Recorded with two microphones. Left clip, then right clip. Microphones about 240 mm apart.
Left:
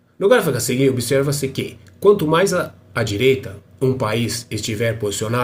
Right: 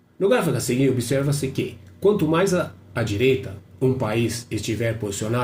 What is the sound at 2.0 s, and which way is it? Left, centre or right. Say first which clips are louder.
Speech: left 5 dB; left.